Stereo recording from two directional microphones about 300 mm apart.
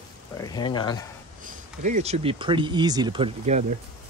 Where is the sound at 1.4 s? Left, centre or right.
Right.